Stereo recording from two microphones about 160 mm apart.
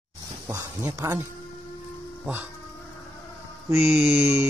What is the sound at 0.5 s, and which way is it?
Speech, 20° right (ahead or behind).